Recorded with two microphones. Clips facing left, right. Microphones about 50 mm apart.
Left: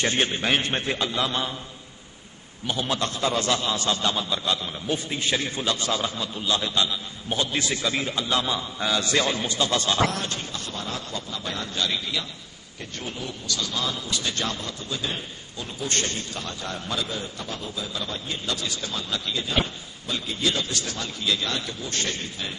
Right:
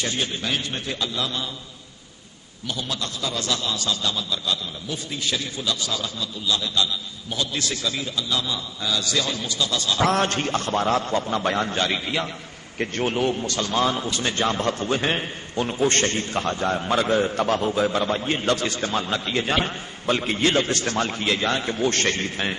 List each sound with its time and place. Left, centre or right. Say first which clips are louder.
0.0 s speech: left 3 dB; left
2.7 s speech: left 3 dB; left
10.1 s a man's voice: right 9 dB; right
12.7 s a man's voice: right 11 dB; right
14.6 s a man's voice: right 9 dB; right
19.3 s a man's voice: right 3 dB; right
21.7 s a man's voice: right 8 dB; right